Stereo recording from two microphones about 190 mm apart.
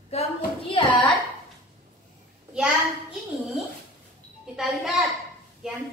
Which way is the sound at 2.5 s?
5° right (ahead or behind).